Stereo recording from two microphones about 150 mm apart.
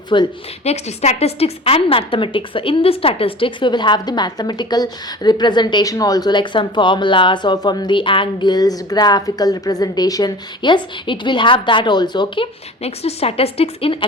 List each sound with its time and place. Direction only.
0.1 s a woman's voice: 30° left (ahead or behind)
0.6 s a woman's voice: 45° left (ahead or behind)
12.8 s a woman's voice: 45° left (ahead or behind)